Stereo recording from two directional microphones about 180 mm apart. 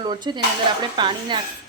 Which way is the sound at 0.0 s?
25° right (ahead or behind).